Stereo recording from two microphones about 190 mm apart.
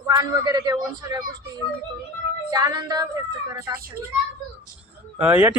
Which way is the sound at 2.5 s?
20° right (ahead or behind).